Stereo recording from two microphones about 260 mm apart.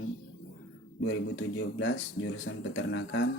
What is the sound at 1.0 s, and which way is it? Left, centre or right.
Speech, left.